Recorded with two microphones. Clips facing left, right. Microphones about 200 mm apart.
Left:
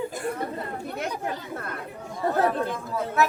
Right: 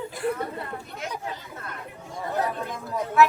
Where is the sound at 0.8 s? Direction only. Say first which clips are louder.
Left 4 dB; 60° left (ahead or behind).